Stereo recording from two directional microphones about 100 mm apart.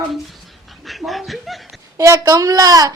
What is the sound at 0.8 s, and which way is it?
Chuckle, centre (ahead or behind).